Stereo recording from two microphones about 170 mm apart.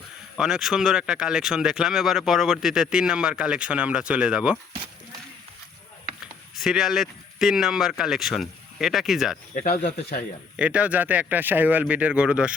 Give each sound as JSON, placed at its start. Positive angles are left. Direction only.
{"t": 0.3, "sound": "speech", "side_deg": -5}
{"t": 6.6, "sound": "speech", "side_deg": 0}
{"t": 9.6, "sound": "speech", "side_deg": 45}
{"t": 10.6, "sound": "speech", "side_deg": -5}